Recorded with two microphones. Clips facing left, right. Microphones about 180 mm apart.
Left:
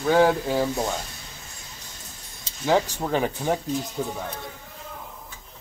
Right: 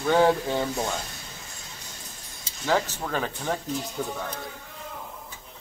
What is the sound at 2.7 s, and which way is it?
Speech, 20° left (ahead or behind).